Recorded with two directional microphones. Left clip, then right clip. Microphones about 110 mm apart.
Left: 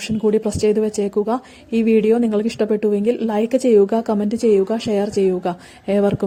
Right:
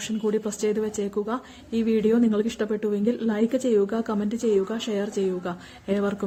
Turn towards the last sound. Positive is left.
turn(degrees=55)  # may be behind; listen again after turning